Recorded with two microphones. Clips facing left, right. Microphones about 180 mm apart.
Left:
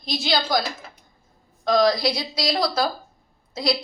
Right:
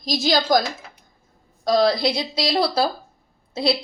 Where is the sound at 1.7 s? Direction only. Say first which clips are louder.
Right 1 dB; 30° right (ahead or behind).